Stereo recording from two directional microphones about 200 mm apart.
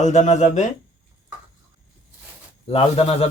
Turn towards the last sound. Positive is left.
turn(degrees=30)  # may be behind; listen again after turning